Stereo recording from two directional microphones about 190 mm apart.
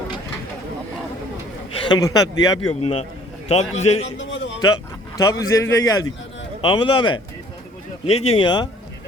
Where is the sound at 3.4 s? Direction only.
35° left (ahead or behind).